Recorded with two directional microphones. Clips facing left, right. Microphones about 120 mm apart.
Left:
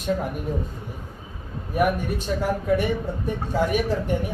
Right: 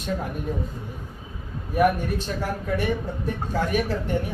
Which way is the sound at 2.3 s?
5° left (ahead or behind).